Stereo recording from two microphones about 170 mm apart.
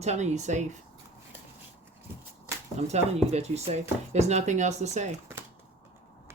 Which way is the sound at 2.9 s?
40° right (ahead or behind).